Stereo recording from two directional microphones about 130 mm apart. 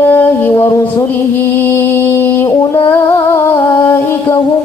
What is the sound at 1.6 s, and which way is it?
Mantra, 15° left (ahead or behind).